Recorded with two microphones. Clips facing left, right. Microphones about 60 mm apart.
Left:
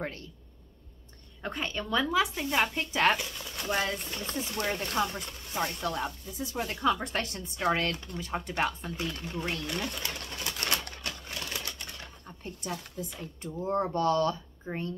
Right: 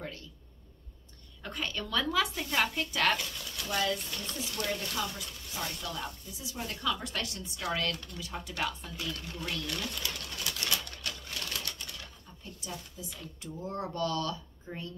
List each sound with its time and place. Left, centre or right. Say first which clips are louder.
1.4 s speech: left 3 dB; left
9.7 s pigeon: left 2 dB; left
12.3 s speech: left 7 dB; left
13.1 s speech: left 4 dB; left